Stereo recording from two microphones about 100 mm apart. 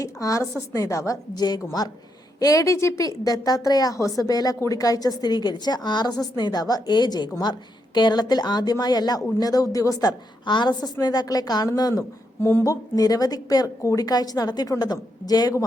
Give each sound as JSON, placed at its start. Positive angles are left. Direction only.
{"t": 0.0, "sound": "a woman's voice", "side_deg": 35}